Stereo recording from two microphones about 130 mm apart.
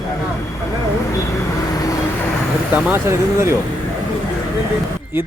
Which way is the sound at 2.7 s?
15° right (ahead or behind).